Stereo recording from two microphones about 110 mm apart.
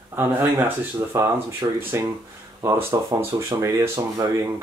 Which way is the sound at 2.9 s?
30° right (ahead or behind).